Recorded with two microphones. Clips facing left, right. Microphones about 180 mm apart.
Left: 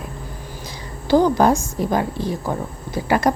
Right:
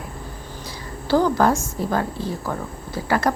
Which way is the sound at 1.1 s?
15° left (ahead or behind).